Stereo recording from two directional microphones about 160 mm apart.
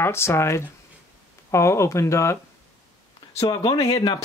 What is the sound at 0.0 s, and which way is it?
Speech, 15° left (ahead or behind).